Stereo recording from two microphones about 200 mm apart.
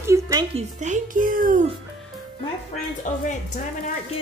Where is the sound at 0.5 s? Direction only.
35° right (ahead or behind).